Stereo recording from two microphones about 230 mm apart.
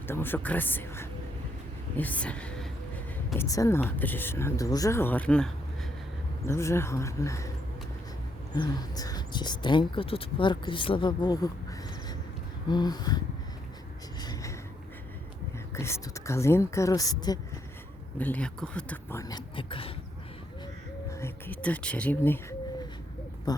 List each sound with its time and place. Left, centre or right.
0.1 s a woman's voice: centre
6.5 s speech: centre
8.5 s speech: centre
12.6 s a sound: centre
15.7 s speech: centre
18.2 s speech: centre; by 19.9 s left
21.1 s speech: centre